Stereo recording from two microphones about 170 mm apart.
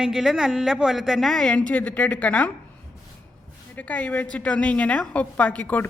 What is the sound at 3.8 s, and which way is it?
A woman's voice, 10° left (ahead or behind).